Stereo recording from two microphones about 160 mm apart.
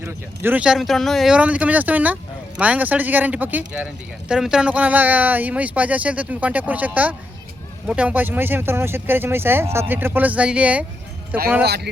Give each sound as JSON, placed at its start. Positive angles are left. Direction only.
{"t": 0.0, "sound": "speech", "side_deg": -10}
{"t": 11.6, "sound": "speech", "side_deg": -90}